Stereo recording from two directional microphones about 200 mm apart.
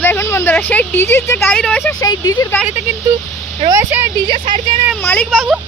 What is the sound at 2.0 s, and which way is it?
Speech, 20° left (ahead or behind).